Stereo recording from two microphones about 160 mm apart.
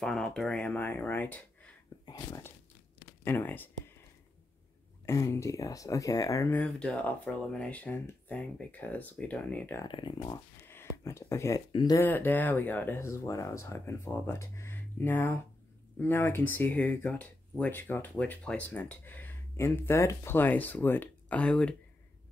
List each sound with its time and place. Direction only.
0.0 s speech: 5° left (ahead or behind)
2.0 s speech: 25° left (ahead or behind)
3.3 s speech: 10° left (ahead or behind)
5.0 s speech: 20° left (ahead or behind)
9.8 s speech: 30° left (ahead or behind)
12.1 s speech: 10° left (ahead or behind)